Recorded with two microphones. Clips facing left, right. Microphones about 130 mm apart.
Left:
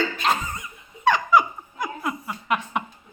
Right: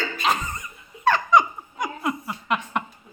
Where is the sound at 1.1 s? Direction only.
5° left (ahead or behind).